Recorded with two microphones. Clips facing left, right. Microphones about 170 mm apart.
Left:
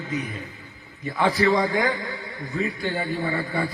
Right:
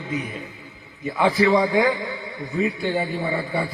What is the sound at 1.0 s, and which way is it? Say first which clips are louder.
A man's voice: right 2 dB; 20° right (ahead or behind).